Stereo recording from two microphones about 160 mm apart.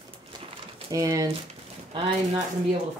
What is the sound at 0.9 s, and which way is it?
Speech, 20° right (ahead or behind).